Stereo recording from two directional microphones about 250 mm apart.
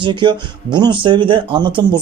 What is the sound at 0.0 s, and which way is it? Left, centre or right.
Speech, centre.